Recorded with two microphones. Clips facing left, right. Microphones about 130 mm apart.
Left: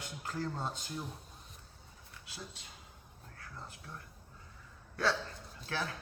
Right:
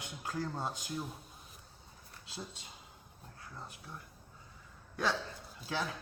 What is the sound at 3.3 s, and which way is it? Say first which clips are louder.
Speech: even; 20° right (ahead or behind).